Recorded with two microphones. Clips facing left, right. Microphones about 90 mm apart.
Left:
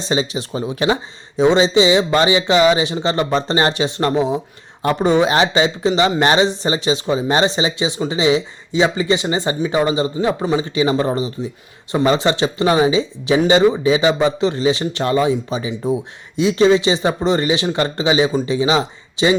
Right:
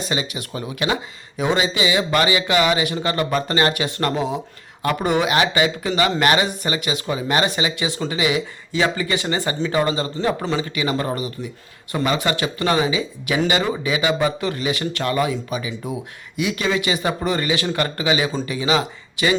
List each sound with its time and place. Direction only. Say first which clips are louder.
0.0 s speech: left 5 dB; 25° left (ahead or behind)